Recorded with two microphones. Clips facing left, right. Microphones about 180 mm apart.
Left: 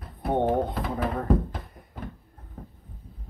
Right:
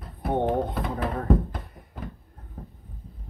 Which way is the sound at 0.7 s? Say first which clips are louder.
Even; centre (ahead or behind).